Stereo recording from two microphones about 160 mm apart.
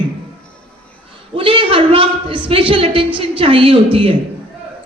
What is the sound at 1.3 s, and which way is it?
A woman's voice, 35° right (ahead or behind).